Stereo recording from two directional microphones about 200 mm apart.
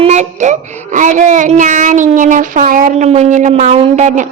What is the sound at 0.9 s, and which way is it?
Speech, 40° right (ahead or behind).